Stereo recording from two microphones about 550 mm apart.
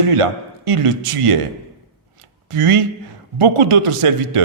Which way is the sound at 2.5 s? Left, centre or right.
Right.